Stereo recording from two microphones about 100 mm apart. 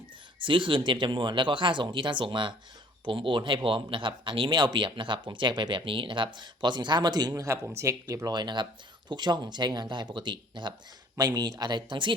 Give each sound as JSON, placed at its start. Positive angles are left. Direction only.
{"t": 0.4, "sound": "speech", "side_deg": -55}
{"t": 8.3, "sound": "speech", "side_deg": -50}
{"t": 11.2, "sound": "speech", "side_deg": -40}